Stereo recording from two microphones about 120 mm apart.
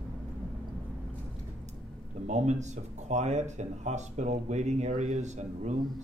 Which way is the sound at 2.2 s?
70° right (ahead or behind).